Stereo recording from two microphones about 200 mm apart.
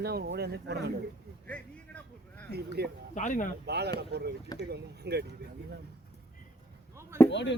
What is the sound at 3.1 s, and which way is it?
Speech, 40° left (ahead or behind).